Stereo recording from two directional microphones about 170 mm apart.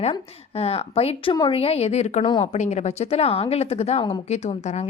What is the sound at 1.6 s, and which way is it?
A woman's voice, 35° left (ahead or behind).